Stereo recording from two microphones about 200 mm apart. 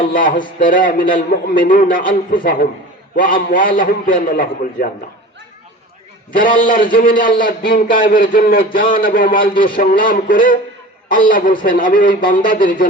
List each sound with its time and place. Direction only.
0.1 s a man's voice: 45° left (ahead or behind)
6.6 s a man's voice: 45° left (ahead or behind)